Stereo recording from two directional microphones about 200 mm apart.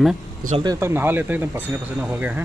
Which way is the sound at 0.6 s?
15° right (ahead or behind).